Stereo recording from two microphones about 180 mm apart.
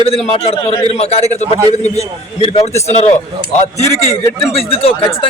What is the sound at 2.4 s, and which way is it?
Speech, 30° left (ahead or behind).